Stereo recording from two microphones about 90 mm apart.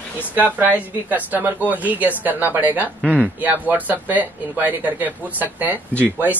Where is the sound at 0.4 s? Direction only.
20° right (ahead or behind).